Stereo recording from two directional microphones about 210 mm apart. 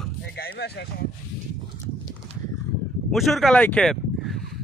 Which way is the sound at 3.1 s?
Centre (ahead or behind).